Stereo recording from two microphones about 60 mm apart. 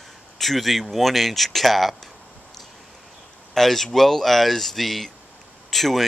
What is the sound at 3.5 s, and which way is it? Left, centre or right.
Speech, centre.